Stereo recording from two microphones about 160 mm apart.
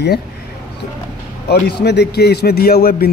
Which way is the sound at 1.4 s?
90° left.